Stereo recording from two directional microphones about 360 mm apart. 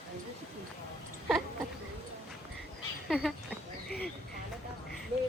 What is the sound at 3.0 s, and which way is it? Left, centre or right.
Speech, centre.